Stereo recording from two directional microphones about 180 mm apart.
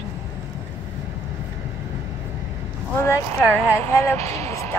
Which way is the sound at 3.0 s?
15° left (ahead or behind).